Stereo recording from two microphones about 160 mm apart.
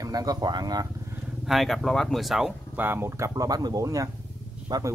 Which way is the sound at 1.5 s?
Centre (ahead or behind).